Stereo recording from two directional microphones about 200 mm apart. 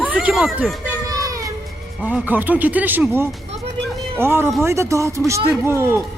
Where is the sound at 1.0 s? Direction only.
15° right (ahead or behind).